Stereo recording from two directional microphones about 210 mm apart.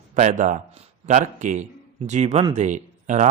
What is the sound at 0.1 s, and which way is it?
A man's voice, 35° right (ahead or behind).